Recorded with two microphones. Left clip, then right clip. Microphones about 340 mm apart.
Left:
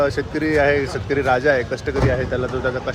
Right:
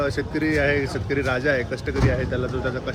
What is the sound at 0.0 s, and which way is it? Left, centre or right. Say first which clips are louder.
Speech: left 4 dB; centre.